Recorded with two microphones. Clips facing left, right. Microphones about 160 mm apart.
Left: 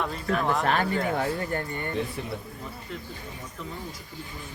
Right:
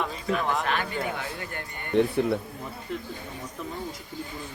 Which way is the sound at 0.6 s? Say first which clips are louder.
Left 4 dB; 40° left (ahead or behind).